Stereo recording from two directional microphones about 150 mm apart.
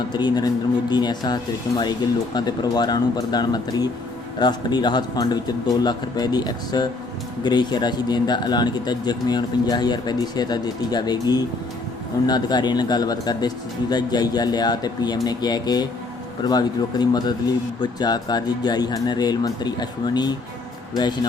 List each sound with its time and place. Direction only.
0.1 s speech: 30° left (ahead or behind)